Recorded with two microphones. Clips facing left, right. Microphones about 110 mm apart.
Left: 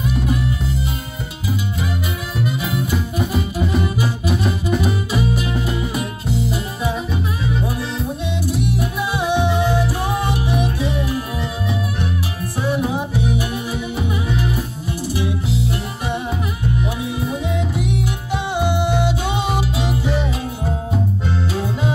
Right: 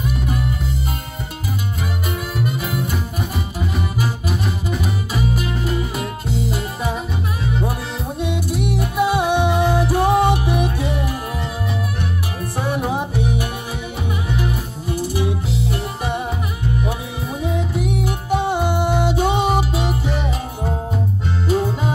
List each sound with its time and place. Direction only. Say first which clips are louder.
2.6 s music: left 2 dB; 45° right (ahead or behind)
5.3 s music: left 1 dB; 45° right (ahead or behind)
8.2 s music: right 4 dB; 50° right (ahead or behind)
12.6 s music: left 2 dB; 50° right (ahead or behind)
15.0 s music: right 1 dB; 45° right (ahead or behind)
17.5 s music: even; 45° right (ahead or behind)